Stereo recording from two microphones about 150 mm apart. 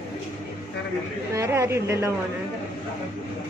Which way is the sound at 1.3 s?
20° right (ahead or behind).